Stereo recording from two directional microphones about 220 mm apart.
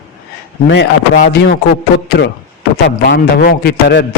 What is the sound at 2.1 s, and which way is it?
A man's voice, 50° left (ahead or behind).